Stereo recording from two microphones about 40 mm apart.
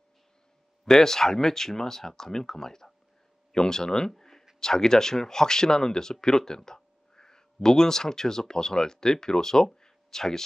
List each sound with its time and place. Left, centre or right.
0.8 s speech: centre
4.1 s a sound: centre
4.6 s speech: centre